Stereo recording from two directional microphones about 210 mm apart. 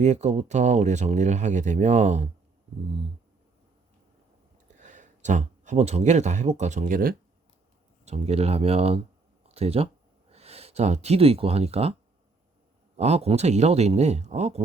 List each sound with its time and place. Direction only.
0.0 s speech: 30° right (ahead or behind)
4.7 s speech: 35° right (ahead or behind)
8.0 s speech: 30° right (ahead or behind)
13.0 s speech: 30° right (ahead or behind)